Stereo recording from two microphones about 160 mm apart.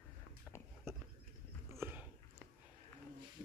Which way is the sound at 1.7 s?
15° right (ahead or behind).